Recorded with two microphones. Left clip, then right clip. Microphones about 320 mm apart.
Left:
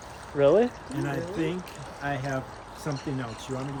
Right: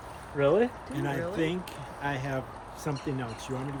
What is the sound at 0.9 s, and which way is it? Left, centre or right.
Speech, centre.